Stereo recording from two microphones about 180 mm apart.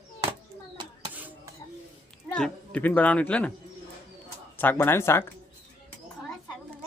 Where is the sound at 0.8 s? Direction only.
25° right (ahead or behind).